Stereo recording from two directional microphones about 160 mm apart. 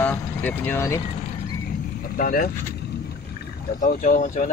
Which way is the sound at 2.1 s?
65° left (ahead or behind).